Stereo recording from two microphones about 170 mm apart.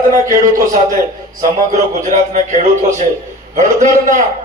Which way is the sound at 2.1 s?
40° right (ahead or behind).